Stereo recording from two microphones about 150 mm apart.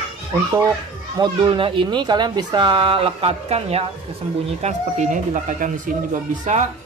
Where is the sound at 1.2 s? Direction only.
35° right (ahead or behind).